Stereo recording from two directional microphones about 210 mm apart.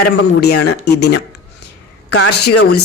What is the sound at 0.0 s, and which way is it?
A man's voice, 50° left (ahead or behind).